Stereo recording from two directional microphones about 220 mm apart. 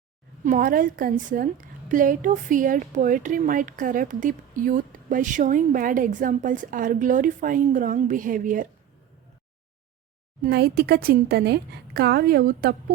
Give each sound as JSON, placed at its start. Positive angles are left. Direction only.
{"t": 0.4, "sound": "a woman's voice", "side_deg": -40}
{"t": 10.4, "sound": "a woman's voice", "side_deg": -45}